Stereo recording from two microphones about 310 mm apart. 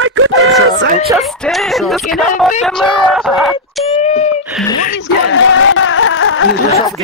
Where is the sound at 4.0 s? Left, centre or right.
Left.